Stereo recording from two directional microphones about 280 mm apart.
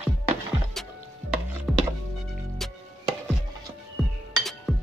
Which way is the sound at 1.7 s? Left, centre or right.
Centre.